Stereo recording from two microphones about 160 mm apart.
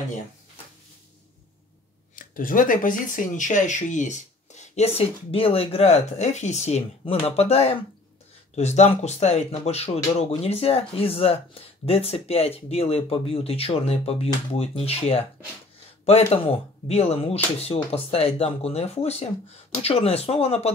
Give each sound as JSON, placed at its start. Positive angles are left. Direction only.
{"t": 2.1, "sound": "speech", "side_deg": 60}
{"t": 16.4, "sound": "speech", "side_deg": 40}